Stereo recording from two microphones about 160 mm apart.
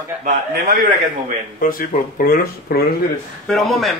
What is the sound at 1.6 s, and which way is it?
Speech, 60° left (ahead or behind).